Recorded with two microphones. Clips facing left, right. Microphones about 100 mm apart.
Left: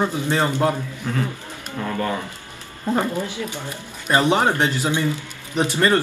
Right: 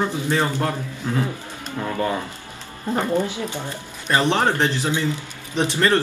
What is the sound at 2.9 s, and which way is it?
Speech, 15° left (ahead or behind).